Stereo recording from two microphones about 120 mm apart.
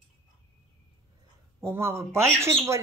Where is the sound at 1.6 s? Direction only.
20° right (ahead or behind).